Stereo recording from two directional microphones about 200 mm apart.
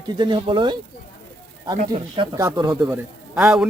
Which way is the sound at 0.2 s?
25° right (ahead or behind).